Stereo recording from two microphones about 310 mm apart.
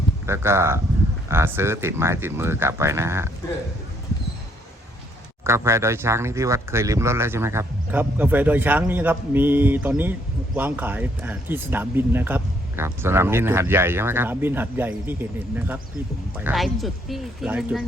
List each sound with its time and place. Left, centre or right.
0.3 s speech: centre
5.5 s speech: centre